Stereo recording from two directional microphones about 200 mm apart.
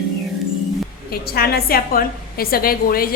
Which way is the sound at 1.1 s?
50° left (ahead or behind).